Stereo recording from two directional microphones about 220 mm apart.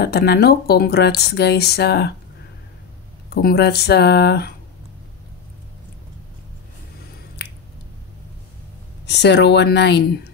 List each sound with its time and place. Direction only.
0.0 s speech: 45° left (ahead or behind)
3.3 s speech: 45° left (ahead or behind)
7.4 s finger snapping: 50° left (ahead or behind)
9.0 s speech: 50° left (ahead or behind)